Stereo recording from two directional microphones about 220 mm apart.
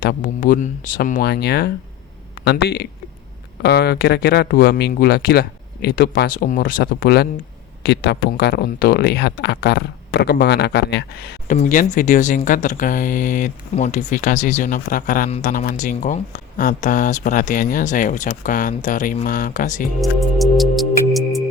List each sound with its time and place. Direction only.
0.0 s speech: 40° left (ahead or behind)
11.5 s speech: 35° left (ahead or behind)
20.0 s music: centre (ahead or behind)